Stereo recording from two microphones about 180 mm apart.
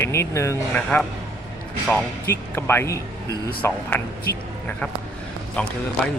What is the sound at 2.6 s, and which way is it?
Speech, 15° left (ahead or behind).